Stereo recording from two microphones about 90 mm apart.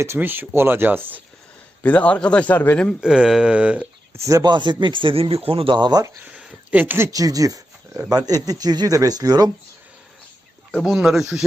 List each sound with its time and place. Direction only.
0.0 s speech: 25° right (ahead or behind)
1.8 s a man's voice: 15° left (ahead or behind)
3.0 s speech: 10° right (ahead or behind)
4.1 s speech: 35° right (ahead or behind)
4.4 s a man's voice: 55° right (ahead or behind); by 5.7 s 90° right
5.7 s speech: 50° right (ahead or behind)
6.2 s speech: 15° right (ahead or behind)
7.1 s speech: 40° right (ahead or behind)
10.8 s speech: centre (ahead or behind)